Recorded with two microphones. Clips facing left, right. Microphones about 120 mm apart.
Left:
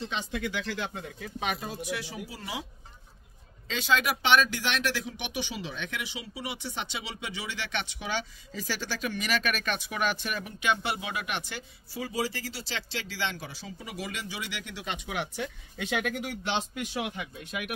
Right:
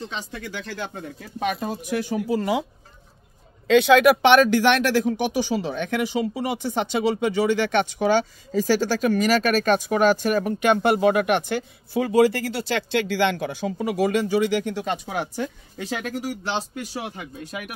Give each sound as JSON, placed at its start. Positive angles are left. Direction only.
{"t": 0.1, "sound": "speech", "side_deg": -40}
{"t": 3.6, "sound": "speech", "side_deg": -65}